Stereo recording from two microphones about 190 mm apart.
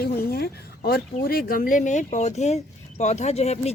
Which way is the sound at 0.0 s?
55° left (ahead or behind).